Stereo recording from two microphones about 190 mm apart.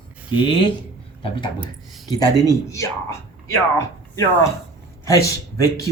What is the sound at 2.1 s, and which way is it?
A child's voice, 20° left (ahead or behind).